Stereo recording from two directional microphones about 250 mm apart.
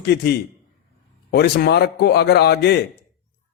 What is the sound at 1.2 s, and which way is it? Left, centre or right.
A man's voice, left.